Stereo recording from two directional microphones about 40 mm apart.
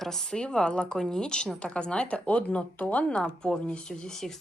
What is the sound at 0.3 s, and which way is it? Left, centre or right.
Speech, centre.